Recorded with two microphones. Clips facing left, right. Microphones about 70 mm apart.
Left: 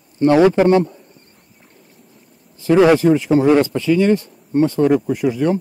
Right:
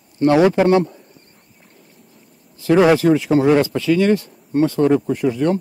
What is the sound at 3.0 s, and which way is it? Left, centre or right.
Speech, right.